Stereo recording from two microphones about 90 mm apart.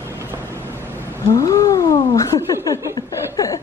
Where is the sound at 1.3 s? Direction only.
40° left (ahead or behind).